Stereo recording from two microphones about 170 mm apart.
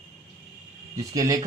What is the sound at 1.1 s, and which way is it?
Speech, 20° right (ahead or behind).